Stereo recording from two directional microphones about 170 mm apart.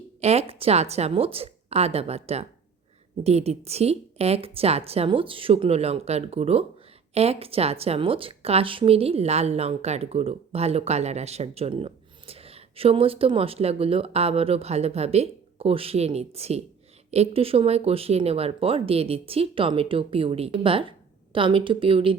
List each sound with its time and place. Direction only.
0.2 s a woman's voice: 40° right (ahead or behind)